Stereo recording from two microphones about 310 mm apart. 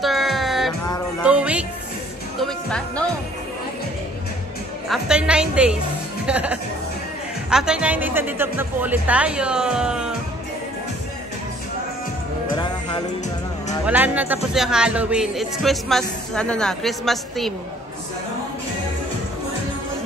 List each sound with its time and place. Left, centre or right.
0.0 s music: centre
4.8 s speech: centre
12.5 s music: centre
13.8 s speech: centre